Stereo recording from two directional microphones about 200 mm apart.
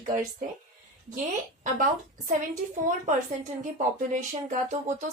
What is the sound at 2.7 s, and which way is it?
A woman's voice, 40° right (ahead or behind).